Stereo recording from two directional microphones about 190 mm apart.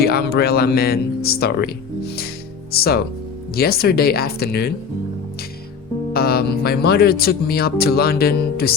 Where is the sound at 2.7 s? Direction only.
55° left (ahead or behind).